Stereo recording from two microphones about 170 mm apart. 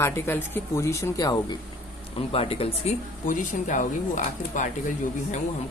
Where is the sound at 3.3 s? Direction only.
50° left (ahead or behind).